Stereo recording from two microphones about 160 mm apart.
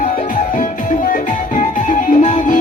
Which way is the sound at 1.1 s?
50° left (ahead or behind).